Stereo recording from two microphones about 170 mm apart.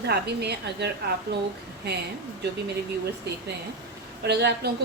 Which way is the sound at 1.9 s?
80° right.